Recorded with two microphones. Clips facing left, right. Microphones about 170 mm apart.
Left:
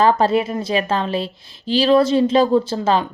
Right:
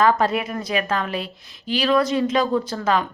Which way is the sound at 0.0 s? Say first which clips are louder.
Left 3 dB; 30° left (ahead or behind).